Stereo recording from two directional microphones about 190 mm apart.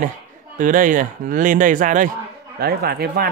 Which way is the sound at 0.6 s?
45° right (ahead or behind).